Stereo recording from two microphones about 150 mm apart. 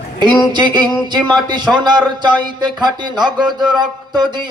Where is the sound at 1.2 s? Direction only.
30° right (ahead or behind).